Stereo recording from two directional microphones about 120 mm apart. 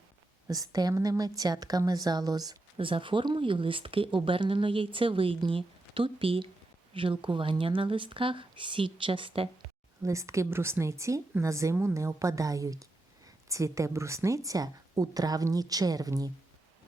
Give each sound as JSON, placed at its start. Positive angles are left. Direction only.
{"t": 0.4, "sound": "a woman's voice", "side_deg": -30}
{"t": 2.7, "sound": "speech", "side_deg": -45}
{"t": 10.0, "sound": "a woman's voice", "side_deg": -25}